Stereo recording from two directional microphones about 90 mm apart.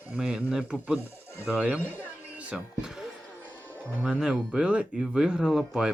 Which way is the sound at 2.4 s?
10° right (ahead or behind).